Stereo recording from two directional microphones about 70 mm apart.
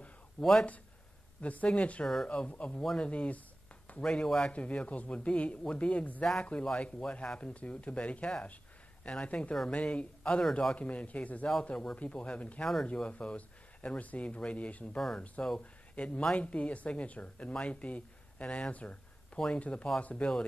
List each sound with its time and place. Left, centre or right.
0.4 s speech: centre
1.4 s speech: centre
2.8 s speech: centre
3.1 s speech: centre
15.0 s speech: centre
15.6 s speech: centre